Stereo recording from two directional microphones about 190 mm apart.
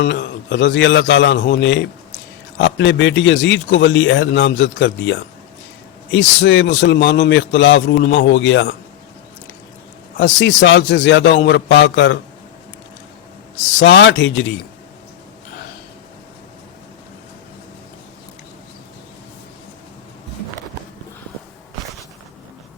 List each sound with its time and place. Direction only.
0.0 s speech: 65° left (ahead or behind)
10.2 s speech: 75° left (ahead or behind)
13.6 s speech: 75° left (ahead or behind)